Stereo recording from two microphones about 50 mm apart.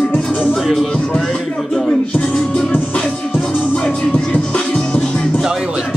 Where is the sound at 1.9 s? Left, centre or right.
Left.